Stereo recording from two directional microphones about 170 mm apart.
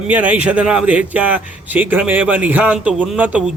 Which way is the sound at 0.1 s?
10° right (ahead or behind).